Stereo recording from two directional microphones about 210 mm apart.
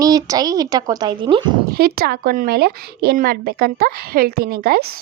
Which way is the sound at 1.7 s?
45° right (ahead or behind).